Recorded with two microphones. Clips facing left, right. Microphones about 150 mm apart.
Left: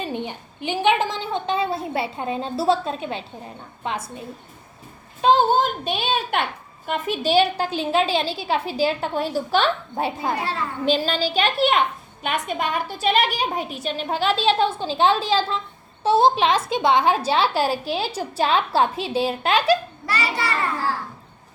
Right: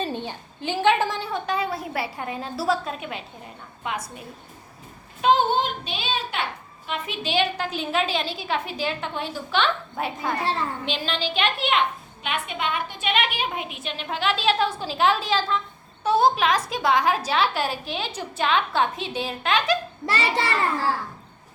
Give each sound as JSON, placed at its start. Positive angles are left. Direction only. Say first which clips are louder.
{"t": 0.0, "sound": "a woman's voice", "louder": "left 1 dB", "side_deg": 15}
{"t": 5.2, "sound": "a woman's voice", "louder": "left 3 dB", "side_deg": 35}
{"t": 20.1, "sound": "a child's voice", "louder": "right 1 dB", "side_deg": -25}